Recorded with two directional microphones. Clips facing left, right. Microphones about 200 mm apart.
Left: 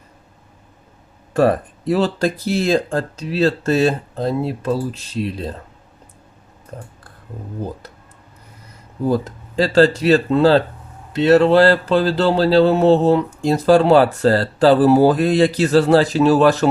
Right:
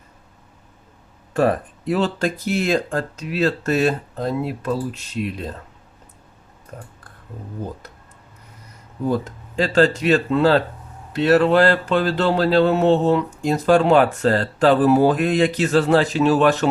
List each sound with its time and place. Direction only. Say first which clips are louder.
1.3 s speech: left 3 dB; 35° left (ahead or behind)
9.0 s speech: left 3 dB; 35° left (ahead or behind)